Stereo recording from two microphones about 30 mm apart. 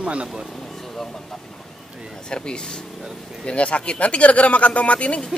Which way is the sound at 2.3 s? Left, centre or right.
Left.